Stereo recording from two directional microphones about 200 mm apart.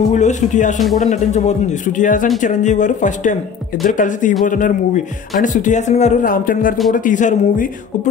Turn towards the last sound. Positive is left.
turn(degrees=40)  # may be behind; listen again after turning